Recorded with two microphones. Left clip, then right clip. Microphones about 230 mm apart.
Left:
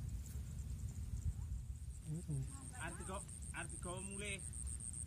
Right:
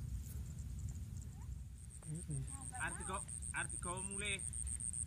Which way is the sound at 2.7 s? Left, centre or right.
Centre.